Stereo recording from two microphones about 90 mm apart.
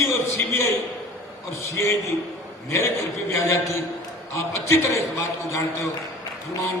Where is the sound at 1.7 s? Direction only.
30° left (ahead or behind).